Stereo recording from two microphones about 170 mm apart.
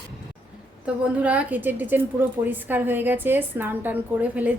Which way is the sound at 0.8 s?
10° right (ahead or behind).